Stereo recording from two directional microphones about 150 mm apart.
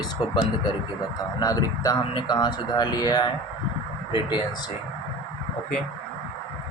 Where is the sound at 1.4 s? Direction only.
25° left (ahead or behind).